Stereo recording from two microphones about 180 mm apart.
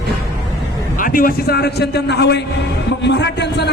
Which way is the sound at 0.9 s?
50° left (ahead or behind).